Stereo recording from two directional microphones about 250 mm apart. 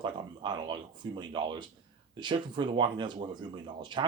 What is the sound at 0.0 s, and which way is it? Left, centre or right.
Speech, centre.